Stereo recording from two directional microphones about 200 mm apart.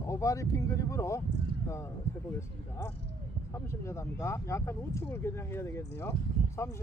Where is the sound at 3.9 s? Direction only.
15° left (ahead or behind).